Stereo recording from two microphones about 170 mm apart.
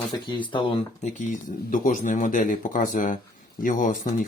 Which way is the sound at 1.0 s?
50° left (ahead or behind).